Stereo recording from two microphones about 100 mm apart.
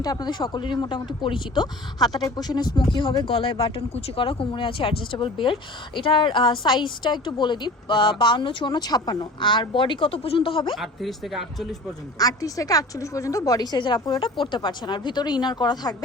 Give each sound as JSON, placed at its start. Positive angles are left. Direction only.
{"t": 0.0, "sound": "speech", "side_deg": 40}
{"t": 10.8, "sound": "speech", "side_deg": 0}
{"t": 12.2, "sound": "a woman's voice", "side_deg": 35}